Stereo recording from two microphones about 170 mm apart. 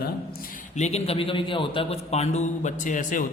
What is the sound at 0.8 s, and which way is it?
A man's voice, 40° left (ahead or behind).